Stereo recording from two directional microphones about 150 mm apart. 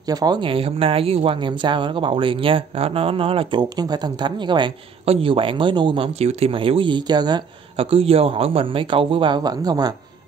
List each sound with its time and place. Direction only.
0.1 s speech: 25° right (ahead or behind)